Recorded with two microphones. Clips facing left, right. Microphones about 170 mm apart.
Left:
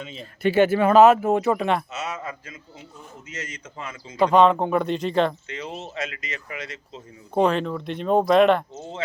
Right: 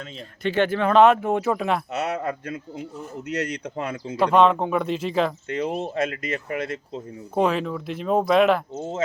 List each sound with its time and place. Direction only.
0.0 s speech: centre (ahead or behind)
1.9 s speech: 60° right (ahead or behind)
4.2 s speech: centre (ahead or behind)
5.5 s speech: 55° right (ahead or behind)
7.3 s speech: 5° right (ahead or behind)